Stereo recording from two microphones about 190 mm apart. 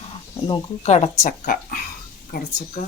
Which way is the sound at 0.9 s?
35° left (ahead or behind).